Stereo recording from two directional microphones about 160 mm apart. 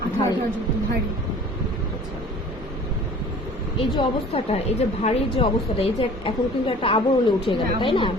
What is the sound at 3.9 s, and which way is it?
A woman's voice, 35° left (ahead or behind).